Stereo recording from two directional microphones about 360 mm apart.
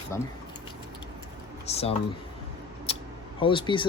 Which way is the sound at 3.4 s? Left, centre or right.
Centre.